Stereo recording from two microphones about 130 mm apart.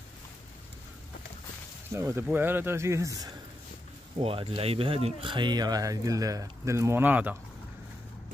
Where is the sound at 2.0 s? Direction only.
20° right (ahead or behind).